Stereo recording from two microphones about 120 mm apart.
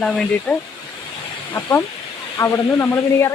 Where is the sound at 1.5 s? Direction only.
20° left (ahead or behind).